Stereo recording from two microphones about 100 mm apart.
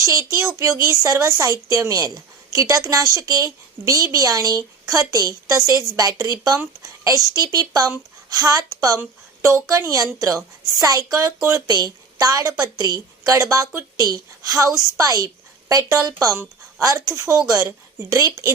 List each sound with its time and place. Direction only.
0.0 s a woman's voice: 30° right (ahead or behind)
9.0 s a woman's voice: 25° right (ahead or behind)
14.7 s a woman's voice: 30° left (ahead or behind)
14.9 s a woman's voice: 40° right (ahead or behind)